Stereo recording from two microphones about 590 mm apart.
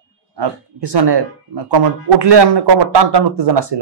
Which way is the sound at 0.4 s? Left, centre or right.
Right.